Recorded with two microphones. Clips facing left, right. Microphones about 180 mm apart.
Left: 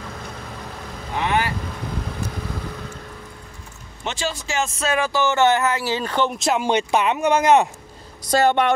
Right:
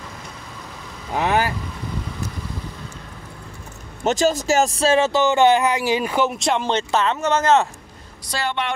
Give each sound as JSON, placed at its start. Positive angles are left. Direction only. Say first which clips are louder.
{"t": 1.2, "sound": "speech", "louder": "right 2 dB", "side_deg": -40}
{"t": 4.0, "sound": "speech", "louder": "right 9 dB", "side_deg": -40}
{"t": 8.3, "sound": "speech", "louder": "left 8 dB", "side_deg": 45}